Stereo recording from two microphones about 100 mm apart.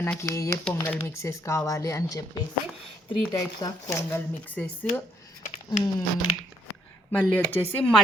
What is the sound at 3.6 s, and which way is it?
Speech, 40° left (ahead or behind).